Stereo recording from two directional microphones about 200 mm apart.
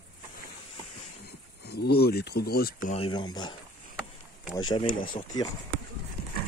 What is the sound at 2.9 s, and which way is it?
Speech, 25° left (ahead or behind).